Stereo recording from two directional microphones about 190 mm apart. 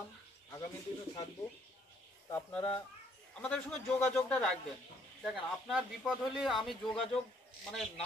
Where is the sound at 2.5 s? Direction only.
30° left (ahead or behind).